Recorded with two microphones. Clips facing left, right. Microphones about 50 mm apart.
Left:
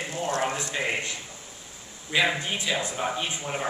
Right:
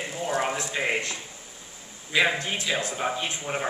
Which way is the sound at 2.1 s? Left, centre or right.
Centre.